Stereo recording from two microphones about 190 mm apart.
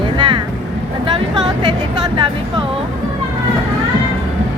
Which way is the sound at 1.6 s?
25° right (ahead or behind).